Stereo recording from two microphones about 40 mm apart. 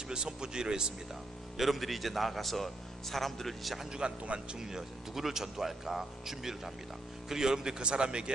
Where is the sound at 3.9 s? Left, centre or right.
Centre.